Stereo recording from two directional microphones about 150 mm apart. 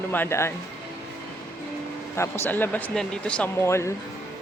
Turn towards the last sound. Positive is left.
turn(degrees=20)  # may be behind; listen again after turning